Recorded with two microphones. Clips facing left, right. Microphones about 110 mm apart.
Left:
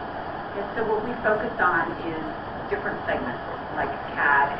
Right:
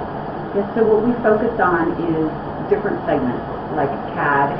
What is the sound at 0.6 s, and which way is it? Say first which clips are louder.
A woman's voice: right 11 dB; 30° right (ahead or behind).